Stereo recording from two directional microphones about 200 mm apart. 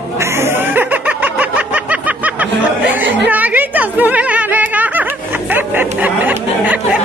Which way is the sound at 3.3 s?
10° right (ahead or behind).